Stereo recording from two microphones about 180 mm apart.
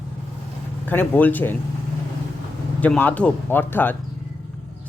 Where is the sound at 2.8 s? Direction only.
10° left (ahead or behind).